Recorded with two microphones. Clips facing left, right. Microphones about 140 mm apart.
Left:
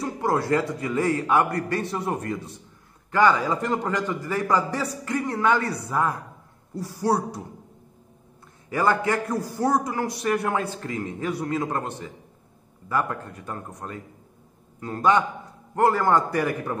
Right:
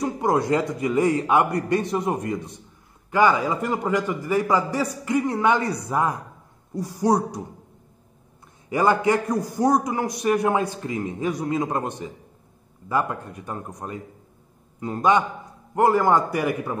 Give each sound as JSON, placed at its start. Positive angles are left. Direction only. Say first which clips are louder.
{"t": 0.0, "sound": "a man's voice", "louder": "right 3 dB", "side_deg": -15}
{"t": 8.6, "sound": "a man's voice", "louder": "right 3 dB", "side_deg": -20}